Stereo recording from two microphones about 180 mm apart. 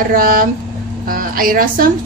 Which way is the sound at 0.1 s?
50° right (ahead or behind).